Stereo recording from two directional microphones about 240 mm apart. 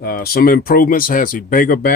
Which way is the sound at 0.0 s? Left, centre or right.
Left.